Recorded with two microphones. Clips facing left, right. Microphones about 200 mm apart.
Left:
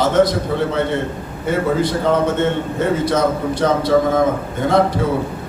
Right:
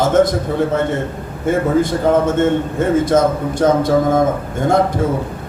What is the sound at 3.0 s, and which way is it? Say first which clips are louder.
A man's voice: right 3 dB; 45° right (ahead or behind).